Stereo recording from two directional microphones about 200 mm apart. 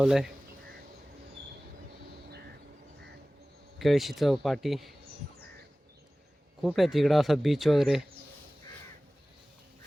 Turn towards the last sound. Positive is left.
turn(degrees=0)  # may be behind; listen again after turning